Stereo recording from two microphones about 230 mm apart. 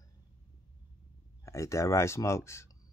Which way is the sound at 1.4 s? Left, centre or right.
Centre.